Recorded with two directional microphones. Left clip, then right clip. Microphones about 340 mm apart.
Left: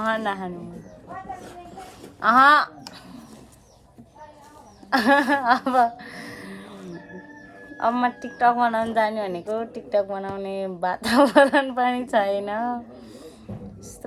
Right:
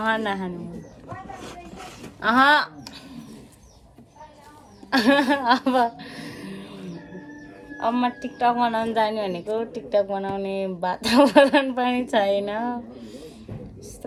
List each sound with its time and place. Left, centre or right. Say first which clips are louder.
0.1 s a woman's voice: right 1 dB; centre
2.2 s a woman's voice: left 2 dB; centre
4.9 s a woman's voice: left 1 dB; centre
7.8 s speech: left 1 dB; left
8.6 s a woman's voice: left 1 dB; centre